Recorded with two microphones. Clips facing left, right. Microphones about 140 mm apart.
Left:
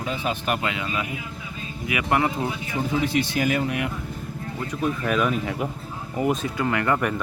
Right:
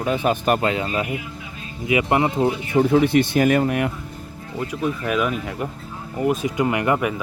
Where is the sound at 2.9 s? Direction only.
60° right (ahead or behind).